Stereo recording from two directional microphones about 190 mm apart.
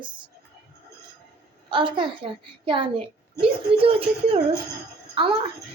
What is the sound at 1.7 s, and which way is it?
A woman's voice, 25° right (ahead or behind).